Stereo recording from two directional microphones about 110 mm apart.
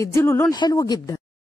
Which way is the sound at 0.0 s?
25° left (ahead or behind).